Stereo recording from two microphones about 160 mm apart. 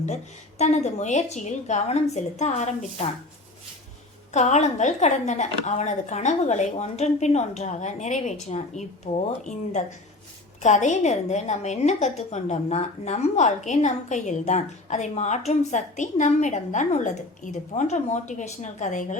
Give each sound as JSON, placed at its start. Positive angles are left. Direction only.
{"t": 0.6, "sound": "a woman's voice", "side_deg": 45}
{"t": 4.3, "sound": "a woman's voice", "side_deg": 45}